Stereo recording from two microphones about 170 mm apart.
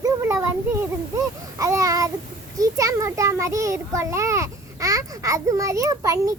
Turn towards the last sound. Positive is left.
turn(degrees=-20)  # may be behind; listen again after turning